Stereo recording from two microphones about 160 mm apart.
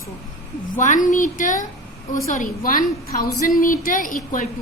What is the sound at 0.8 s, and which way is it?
A woman's voice, 55° left (ahead or behind).